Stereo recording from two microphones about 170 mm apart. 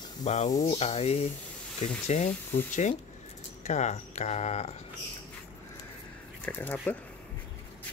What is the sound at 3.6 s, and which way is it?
Speech, 45° left (ahead or behind).